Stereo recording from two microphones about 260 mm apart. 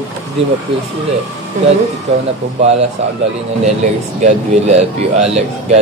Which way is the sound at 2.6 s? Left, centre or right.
Right.